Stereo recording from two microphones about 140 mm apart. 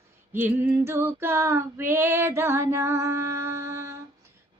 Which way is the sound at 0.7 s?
20° right (ahead or behind).